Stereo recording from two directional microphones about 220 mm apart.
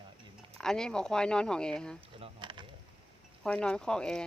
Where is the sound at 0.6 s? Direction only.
5° left (ahead or behind).